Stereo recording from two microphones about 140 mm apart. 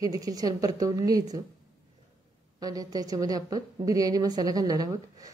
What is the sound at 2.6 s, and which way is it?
Speech, 25° right (ahead or behind).